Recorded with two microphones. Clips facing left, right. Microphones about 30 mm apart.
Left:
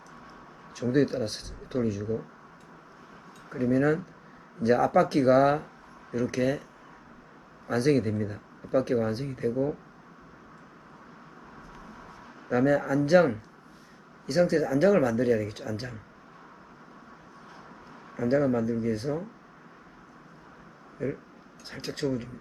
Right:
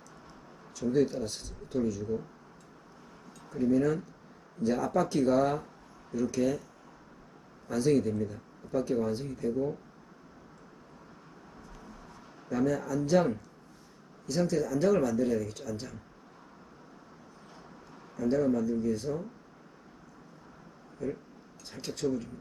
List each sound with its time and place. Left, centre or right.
0.7 s speech: left
3.5 s speech: left
7.7 s speech: left
11.7 s a sound: left
12.5 s speech: left
18.1 s speech: left
21.0 s speech: left
21.8 s speech: left
22.0 s speech: left